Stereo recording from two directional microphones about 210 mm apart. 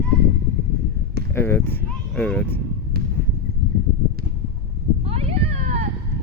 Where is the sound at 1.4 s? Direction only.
10° left (ahead or behind).